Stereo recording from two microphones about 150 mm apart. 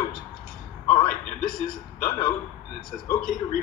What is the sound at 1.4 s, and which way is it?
Speech, 5° left (ahead or behind).